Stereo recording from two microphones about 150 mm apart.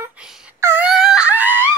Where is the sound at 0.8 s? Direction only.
5° right (ahead or behind).